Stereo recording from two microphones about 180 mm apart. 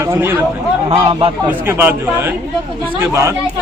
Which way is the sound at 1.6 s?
10° right (ahead or behind).